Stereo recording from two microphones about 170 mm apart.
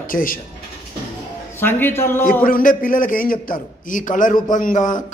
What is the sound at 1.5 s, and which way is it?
Speech, 15° left (ahead or behind).